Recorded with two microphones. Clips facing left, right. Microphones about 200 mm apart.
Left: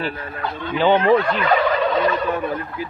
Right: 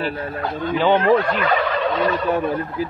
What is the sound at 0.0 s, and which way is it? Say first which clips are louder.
Speech: right 2 dB; 40° right (ahead or behind).